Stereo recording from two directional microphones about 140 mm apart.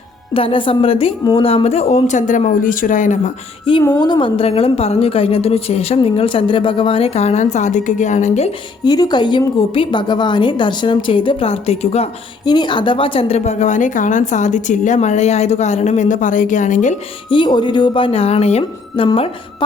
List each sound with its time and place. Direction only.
0.3 s a woman's voice: 40° left (ahead or behind); by 3.3 s 65° left (ahead or behind)
3.7 s a woman's voice: 40° left (ahead or behind); by 8.4 s 60° left (ahead or behind)
8.8 s a woman's voice: 30° left (ahead or behind); by 12.0 s 50° left (ahead or behind)
12.5 s a woman's voice: 35° left (ahead or behind); by 17.0 s 60° left (ahead or behind)
17.2 s a woman's voice: 35° left (ahead or behind)